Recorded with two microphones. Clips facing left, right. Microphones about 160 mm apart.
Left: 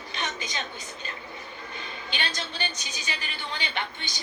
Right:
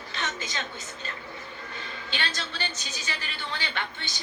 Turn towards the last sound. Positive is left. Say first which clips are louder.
# left 1 dB
turn(degrees=15)  # may be behind; listen again after turning